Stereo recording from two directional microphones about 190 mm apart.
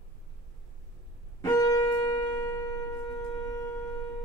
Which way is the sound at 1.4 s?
20° left (ahead or behind).